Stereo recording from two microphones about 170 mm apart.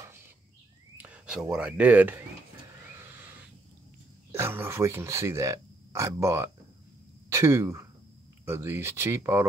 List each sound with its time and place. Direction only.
0.9 s a sound: 5° right (ahead or behind)
1.5 s speech: 5° right (ahead or behind)
4.3 s speech: 15° right (ahead or behind)